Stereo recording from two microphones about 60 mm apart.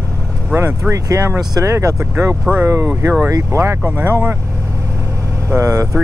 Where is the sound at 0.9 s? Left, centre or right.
Right.